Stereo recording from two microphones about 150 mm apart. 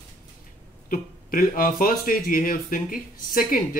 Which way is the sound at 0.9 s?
70° left (ahead or behind).